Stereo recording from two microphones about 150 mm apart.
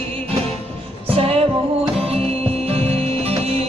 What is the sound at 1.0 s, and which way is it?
Music, 40° right (ahead or behind).